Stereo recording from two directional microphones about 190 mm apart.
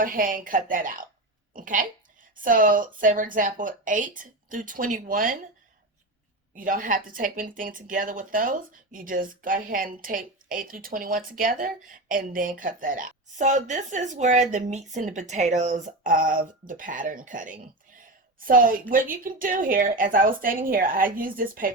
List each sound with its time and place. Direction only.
0.0 s speech: 50° right (ahead or behind)
6.6 s speech: 45° right (ahead or behind)